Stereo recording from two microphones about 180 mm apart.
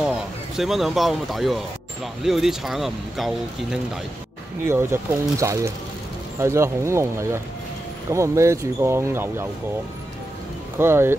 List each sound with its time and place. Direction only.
0.0 s speech: 5° right (ahead or behind)
4.6 s speech: 15° right (ahead or behind)
10.8 s speech: 15° right (ahead or behind)